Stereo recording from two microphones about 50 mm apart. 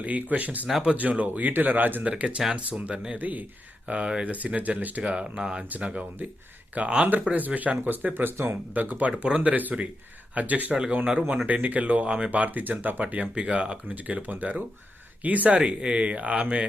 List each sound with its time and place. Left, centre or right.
0.0 s speech: right
2.0 s speech: right
3.2 s speech: right
3.8 s speech: right
4.3 s speech: right
5.8 s speech: right
8.7 s speech: right
10.7 s speech: centre
11.4 s speech: right
13.3 s speech: right
13.9 s speech: right